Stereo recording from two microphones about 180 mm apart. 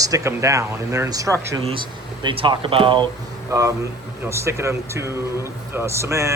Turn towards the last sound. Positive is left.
turn(degrees=-15)  # may be behind; listen again after turning